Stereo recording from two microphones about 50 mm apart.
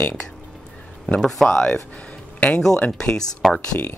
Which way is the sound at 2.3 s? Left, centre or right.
Left.